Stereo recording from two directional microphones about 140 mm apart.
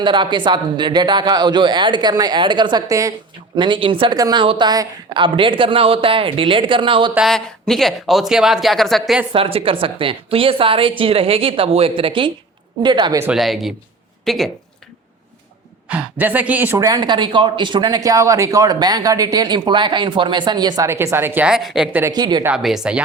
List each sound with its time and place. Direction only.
0.0 s speech: 35° right (ahead or behind)
3.6 s speech: 35° right (ahead or behind)
7.2 s speech: 5° left (ahead or behind)
9.3 s speech: 40° right (ahead or behind)
13.3 s speech: centre (ahead or behind)
15.9 s a man's voice: 10° right (ahead or behind)
16.7 s speech: 30° right (ahead or behind); by 21.8 s 5° right (ahead or behind)
22.1 s speech: 30° right (ahead or behind)
22.4 s speech: 5° right (ahead or behind)